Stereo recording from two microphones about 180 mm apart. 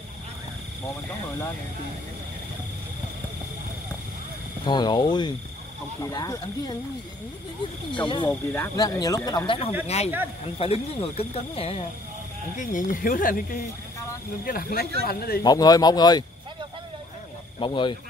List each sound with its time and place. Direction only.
4.6 s speech: 25° left (ahead or behind)
8.0 s speech: 25° left (ahead or behind)
8.5 s speech: 15° left (ahead or behind); by 11.8 s 35° left (ahead or behind)
12.5 s speech: 45° left (ahead or behind)
15.4 s speech: 20° left (ahead or behind)
17.6 s speech: 25° left (ahead or behind)